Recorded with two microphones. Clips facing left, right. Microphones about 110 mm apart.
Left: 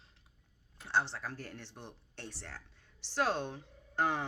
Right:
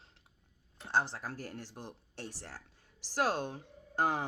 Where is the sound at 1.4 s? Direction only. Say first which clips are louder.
Right 3 dB; 40° right (ahead or behind).